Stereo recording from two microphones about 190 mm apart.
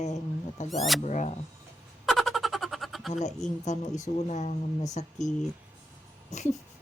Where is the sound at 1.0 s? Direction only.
40° left (ahead or behind).